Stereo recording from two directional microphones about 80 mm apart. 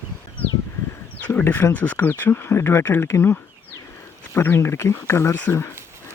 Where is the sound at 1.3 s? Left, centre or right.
Left.